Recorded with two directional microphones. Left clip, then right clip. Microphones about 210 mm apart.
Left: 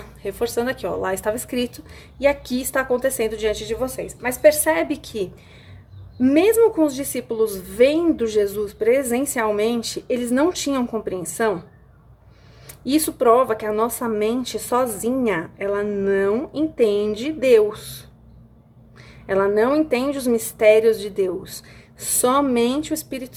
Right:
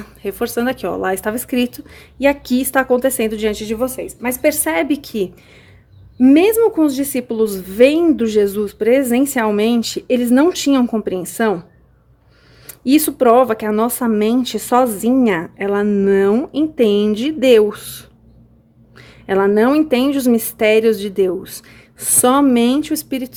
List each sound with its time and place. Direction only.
0.2 s a woman's voice: 30° right (ahead or behind)
12.6 s speech: 30° right (ahead or behind)